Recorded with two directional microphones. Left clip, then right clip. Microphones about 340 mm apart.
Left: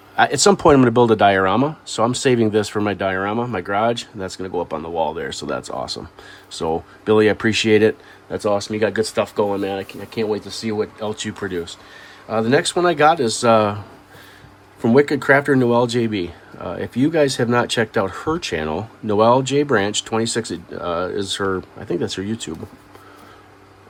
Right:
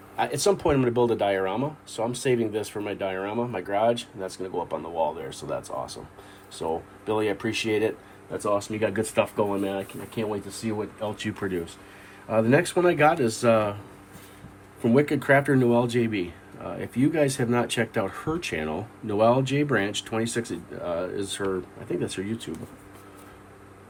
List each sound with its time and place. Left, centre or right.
0.2 s speech: left
7.0 s speech: left
8.8 s speech: centre
14.8 s speech: centre